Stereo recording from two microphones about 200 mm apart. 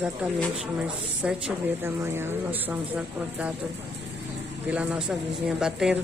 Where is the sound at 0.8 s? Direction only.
5° right (ahead or behind).